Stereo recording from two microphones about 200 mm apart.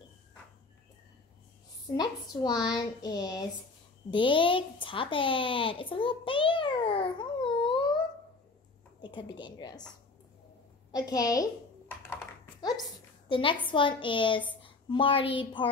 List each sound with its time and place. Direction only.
2.0 s speech: 20° left (ahead or behind)
9.0 s speech: 25° left (ahead or behind)
10.9 s a woman's voice: 20° left (ahead or behind)
13.3 s speech: 25° left (ahead or behind)